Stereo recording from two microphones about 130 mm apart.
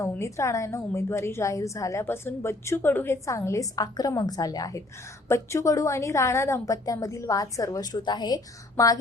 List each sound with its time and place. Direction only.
0.2 s a woman's voice: 20° left (ahead or behind)